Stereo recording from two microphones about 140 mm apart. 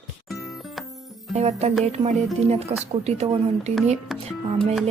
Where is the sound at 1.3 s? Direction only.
50° right (ahead or behind).